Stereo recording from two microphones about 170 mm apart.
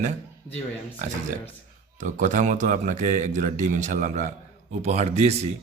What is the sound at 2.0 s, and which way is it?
A man's voice, 50° right (ahead or behind).